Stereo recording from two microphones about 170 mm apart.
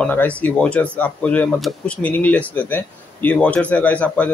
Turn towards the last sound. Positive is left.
turn(degrees=10)  # may be behind; listen again after turning